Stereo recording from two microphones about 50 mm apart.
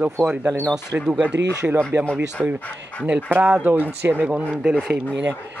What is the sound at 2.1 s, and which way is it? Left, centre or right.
Speech, right.